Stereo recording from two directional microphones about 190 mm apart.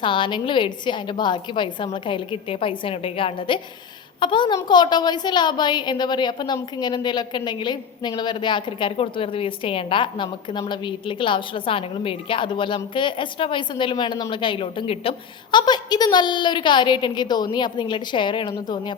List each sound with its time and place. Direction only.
0.0 s a woman's voice: 25° left (ahead or behind)